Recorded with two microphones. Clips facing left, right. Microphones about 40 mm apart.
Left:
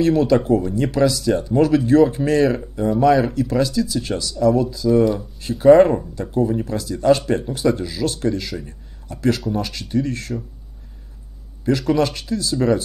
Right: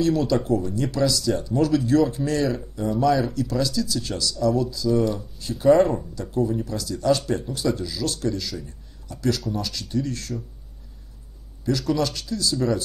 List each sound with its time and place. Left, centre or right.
0.0 s speech: left
11.6 s speech: left